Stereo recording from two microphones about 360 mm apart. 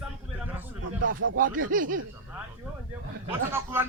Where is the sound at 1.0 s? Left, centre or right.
Right.